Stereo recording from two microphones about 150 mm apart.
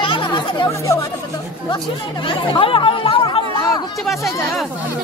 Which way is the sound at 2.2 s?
35° left (ahead or behind).